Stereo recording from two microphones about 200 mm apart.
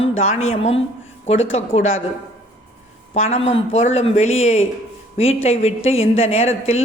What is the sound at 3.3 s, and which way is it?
A woman's voice, 30° left (ahead or behind).